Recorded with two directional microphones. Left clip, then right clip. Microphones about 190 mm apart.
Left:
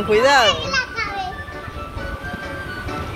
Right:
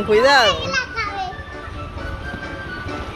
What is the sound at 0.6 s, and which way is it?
Children playing, 40° right (ahead or behind).